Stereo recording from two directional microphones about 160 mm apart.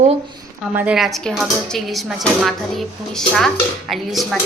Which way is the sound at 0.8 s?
5° right (ahead or behind).